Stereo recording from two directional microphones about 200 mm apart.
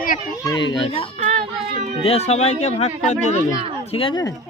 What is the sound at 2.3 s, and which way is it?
Speech, 35° left (ahead or behind).